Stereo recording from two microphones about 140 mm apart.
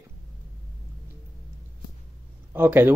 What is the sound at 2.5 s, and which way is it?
Speech, 15° right (ahead or behind).